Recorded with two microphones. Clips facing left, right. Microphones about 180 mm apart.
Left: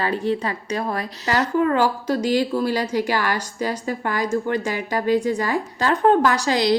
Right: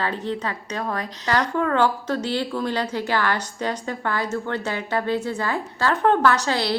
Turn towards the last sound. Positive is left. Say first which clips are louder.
# left 2 dB
turn(degrees=15)  # may be behind; listen again after turning